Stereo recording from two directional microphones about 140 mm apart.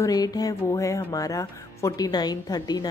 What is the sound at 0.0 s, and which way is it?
Music, 25° left (ahead or behind).